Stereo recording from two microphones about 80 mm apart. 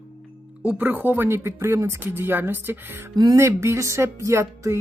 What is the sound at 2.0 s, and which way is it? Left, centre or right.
Speech, right.